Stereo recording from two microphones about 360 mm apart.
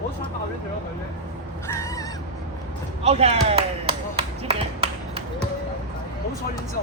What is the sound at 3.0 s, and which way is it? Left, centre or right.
Speech, centre.